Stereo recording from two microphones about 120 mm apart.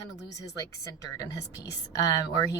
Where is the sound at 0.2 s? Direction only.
30° left (ahead or behind).